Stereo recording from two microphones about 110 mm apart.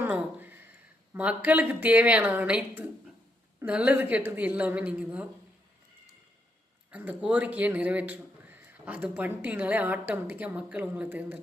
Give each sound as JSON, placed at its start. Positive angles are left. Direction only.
{"t": 0.0, "sound": "a sound", "side_deg": -15}
{"t": 1.1, "sound": "speech", "side_deg": -15}
{"t": 6.9, "sound": "speech", "side_deg": -15}